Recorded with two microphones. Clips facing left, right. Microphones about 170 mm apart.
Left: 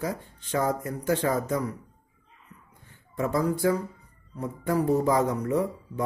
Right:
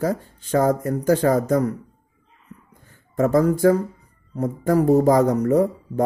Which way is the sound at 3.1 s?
45° right (ahead or behind).